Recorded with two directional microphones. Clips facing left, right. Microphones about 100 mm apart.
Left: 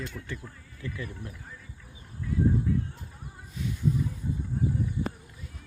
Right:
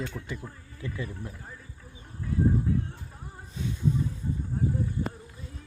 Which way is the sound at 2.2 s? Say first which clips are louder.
Even; 35° right (ahead or behind).